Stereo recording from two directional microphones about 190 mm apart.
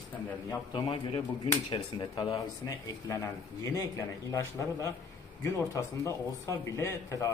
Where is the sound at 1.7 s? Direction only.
20° left (ahead or behind).